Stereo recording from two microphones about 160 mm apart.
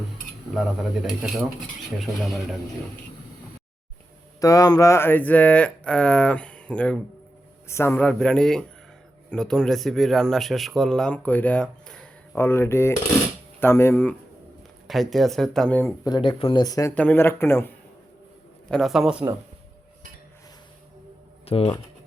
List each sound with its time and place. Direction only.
0.5 s speech: centre (ahead or behind)
4.4 s speech: 20° left (ahead or behind)
14.8 s speech: centre (ahead or behind)
16.0 s speech: 30° left (ahead or behind)
16.9 s speech: 10° left (ahead or behind)
18.7 s speech: centre (ahead or behind)
21.4 s speech: 35° left (ahead or behind)